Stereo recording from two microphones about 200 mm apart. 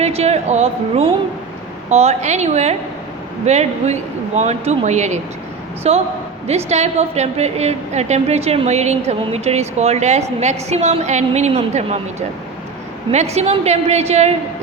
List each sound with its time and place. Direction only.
0.0 s a woman's voice: 35° right (ahead or behind)
13.1 s a woman's voice: 35° right (ahead or behind)